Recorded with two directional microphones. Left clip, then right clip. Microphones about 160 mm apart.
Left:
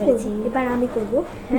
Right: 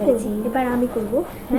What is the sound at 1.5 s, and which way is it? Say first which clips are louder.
Speech: right 1 dB; 10° right (ahead or behind).